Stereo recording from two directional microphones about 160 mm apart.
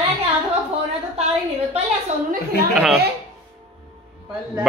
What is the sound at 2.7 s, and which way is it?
Speech, centre (ahead or behind).